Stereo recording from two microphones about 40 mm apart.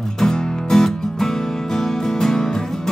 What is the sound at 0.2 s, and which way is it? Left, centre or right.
Music, centre.